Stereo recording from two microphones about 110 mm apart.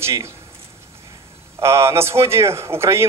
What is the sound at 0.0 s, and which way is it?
Speech, 25° right (ahead or behind).